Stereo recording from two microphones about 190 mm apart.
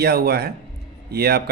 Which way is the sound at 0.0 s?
55° right (ahead or behind).